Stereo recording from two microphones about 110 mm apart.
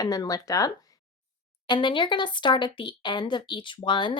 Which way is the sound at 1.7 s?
45° left (ahead or behind).